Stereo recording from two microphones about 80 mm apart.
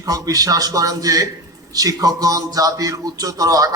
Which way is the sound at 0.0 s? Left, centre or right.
Right.